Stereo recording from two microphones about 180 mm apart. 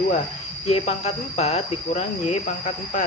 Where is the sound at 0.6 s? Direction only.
35° left (ahead or behind).